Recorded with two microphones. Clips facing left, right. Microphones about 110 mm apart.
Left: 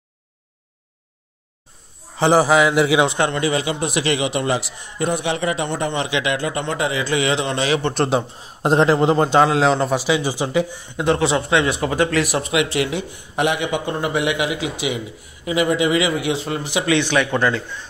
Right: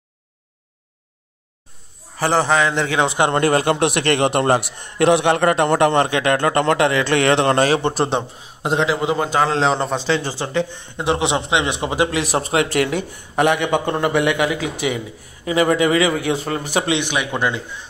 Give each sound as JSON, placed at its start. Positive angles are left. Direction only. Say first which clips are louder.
{"t": 2.1, "sound": "a man's voice", "louder": "left 3 dB", "side_deg": 20}
{"t": 2.4, "sound": "a man's voice", "louder": "left 3 dB", "side_deg": 10}
{"t": 3.3, "sound": "a man's voice", "louder": "right 5 dB", "side_deg": -55}
{"t": 5.3, "sound": "a man's voice", "louder": "right 6 dB", "side_deg": -55}
{"t": 6.0, "sound": "a man's voice", "louder": "right 4 dB", "side_deg": -50}
{"t": 7.9, "sound": "a man's voice", "louder": "left 1 dB", "side_deg": 0}
{"t": 8.6, "sound": "a man's voice", "louder": "left 4 dB", "side_deg": 40}
{"t": 9.2, "sound": "a man's voice", "louder": "left 3 dB", "side_deg": 25}
{"t": 9.5, "sound": "a man's voice", "louder": "left 1 dB", "side_deg": 5}
{"t": 11.1, "sound": "a man's voice", "louder": "left 1 dB", "side_deg": -20}
{"t": 12.3, "sound": "speech", "louder": "right 1 dB", "side_deg": -40}
{"t": 16.8, "sound": "a man's voice", "louder": "left 3 dB", "side_deg": -15}